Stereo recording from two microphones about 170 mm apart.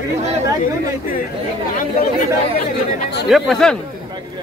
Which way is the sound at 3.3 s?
Centre (ahead or behind).